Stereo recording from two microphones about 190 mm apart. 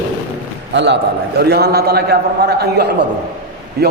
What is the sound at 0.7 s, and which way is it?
A man's voice, 65° right (ahead or behind).